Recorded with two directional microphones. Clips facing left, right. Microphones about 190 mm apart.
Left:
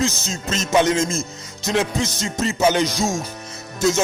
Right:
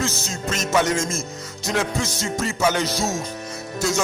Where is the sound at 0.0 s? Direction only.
20° left (ahead or behind).